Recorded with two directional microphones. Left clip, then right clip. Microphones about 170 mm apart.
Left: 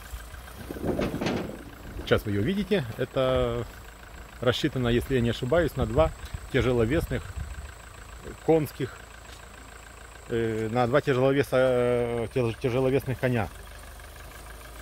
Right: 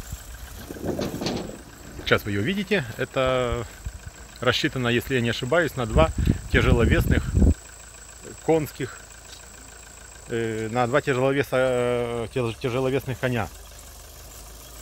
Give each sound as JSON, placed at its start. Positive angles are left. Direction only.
{"t": 0.9, "sound": "vehicle", "side_deg": -40}
{"t": 2.0, "sound": "speech", "side_deg": -10}
{"t": 8.5, "sound": "speech", "side_deg": -5}
{"t": 10.3, "sound": "speech", "side_deg": -5}